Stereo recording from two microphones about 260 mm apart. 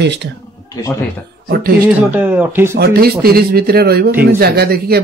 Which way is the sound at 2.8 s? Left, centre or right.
Right.